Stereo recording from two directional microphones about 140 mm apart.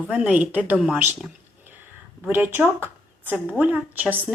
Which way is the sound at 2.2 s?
15° right (ahead or behind).